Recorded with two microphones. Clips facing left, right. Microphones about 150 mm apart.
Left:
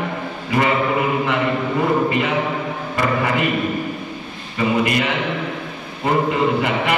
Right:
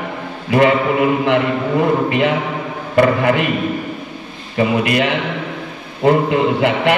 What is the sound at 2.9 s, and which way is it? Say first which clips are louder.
Speech: right 7 dB; 65° right (ahead or behind).